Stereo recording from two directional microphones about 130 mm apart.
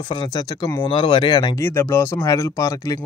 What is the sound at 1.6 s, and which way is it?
Speech, 20° left (ahead or behind).